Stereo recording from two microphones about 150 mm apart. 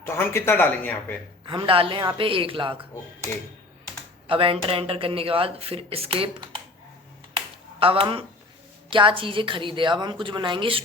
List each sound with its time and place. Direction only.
0.0 s speech: 15° left (ahead or behind)
1.5 s speech: 35° right (ahead or behind)
4.3 s speech: 35° right (ahead or behind)
7.3 s a sound: 35° right (ahead or behind)
8.9 s speech: 35° right (ahead or behind)